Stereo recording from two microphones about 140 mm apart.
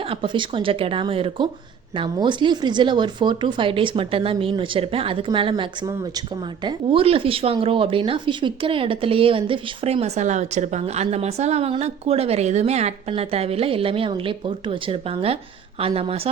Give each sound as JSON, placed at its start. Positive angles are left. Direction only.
{"t": 0.1, "sound": "speech", "side_deg": -40}
{"t": 6.7, "sound": "speech", "side_deg": -40}